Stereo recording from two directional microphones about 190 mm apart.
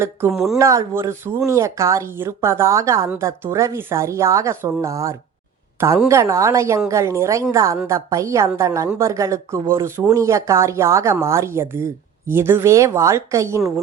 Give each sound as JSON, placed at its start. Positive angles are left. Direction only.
{"t": 0.3, "sound": "speech", "side_deg": 0}
{"t": 0.6, "sound": "a woman's voice", "side_deg": -15}